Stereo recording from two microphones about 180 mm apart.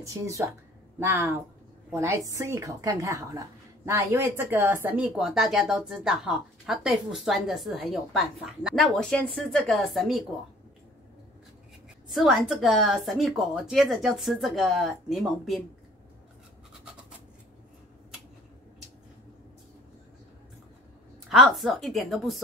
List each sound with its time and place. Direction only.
0.0 s a woman's voice: 15° right (ahead or behind); by 10.2 s centre (ahead or behind)
12.1 s a woman's voice: centre (ahead or behind)
21.3 s a woman's voice: centre (ahead or behind)